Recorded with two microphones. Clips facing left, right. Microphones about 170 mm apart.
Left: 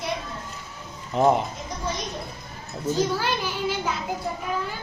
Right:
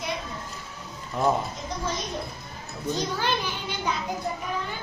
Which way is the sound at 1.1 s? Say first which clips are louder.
Left 5 dB; 20° left (ahead or behind).